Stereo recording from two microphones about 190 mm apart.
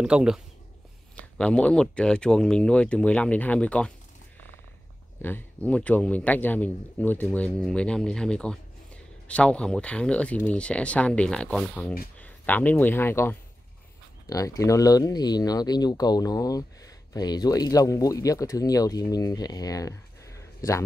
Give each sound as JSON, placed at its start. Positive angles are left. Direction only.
{"t": 0.0, "sound": "speech", "side_deg": -5}
{"t": 5.2, "sound": "a man's voice", "side_deg": 10}